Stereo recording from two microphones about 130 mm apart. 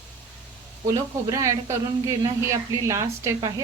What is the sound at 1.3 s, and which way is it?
A woman's voice, 25° right (ahead or behind).